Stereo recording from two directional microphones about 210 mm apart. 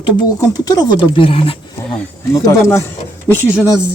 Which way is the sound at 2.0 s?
15° left (ahead or behind).